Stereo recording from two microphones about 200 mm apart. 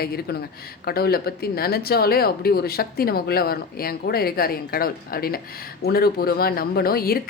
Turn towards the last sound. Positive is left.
turn(degrees=50)  # may be behind; listen again after turning